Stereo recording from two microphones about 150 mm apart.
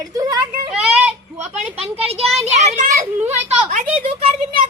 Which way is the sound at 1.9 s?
40° right (ahead or behind).